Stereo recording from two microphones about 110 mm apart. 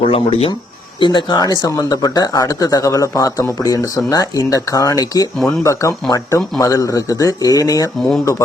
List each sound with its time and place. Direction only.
0.0 s speech: 65° left (ahead or behind)
0.9 s speech: 45° left (ahead or behind)